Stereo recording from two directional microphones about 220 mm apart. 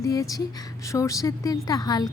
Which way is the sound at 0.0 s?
15° left (ahead or behind).